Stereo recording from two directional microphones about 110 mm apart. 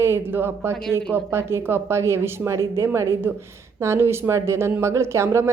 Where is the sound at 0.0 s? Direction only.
20° right (ahead or behind).